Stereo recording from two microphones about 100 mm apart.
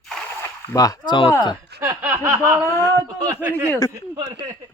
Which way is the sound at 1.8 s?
25° right (ahead or behind).